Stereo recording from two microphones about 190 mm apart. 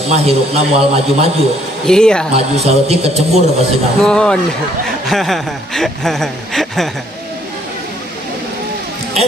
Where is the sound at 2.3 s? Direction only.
35° right (ahead or behind).